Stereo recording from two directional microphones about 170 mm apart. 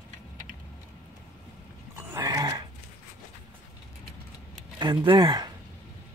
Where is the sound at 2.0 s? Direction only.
20° right (ahead or behind).